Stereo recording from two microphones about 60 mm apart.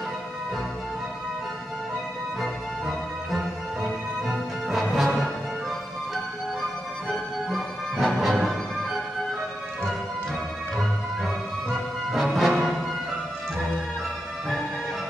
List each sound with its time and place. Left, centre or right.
3.3 s music: centre
7.1 s music: centre
10.8 s music: centre